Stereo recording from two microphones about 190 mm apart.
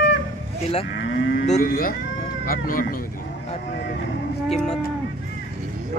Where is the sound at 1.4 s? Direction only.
45° left (ahead or behind).